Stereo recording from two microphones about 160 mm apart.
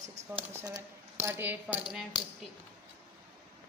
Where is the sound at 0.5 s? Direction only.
25° right (ahead or behind).